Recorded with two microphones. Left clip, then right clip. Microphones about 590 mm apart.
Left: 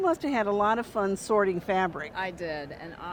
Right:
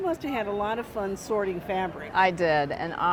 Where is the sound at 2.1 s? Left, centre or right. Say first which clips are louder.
Right 11 dB; right.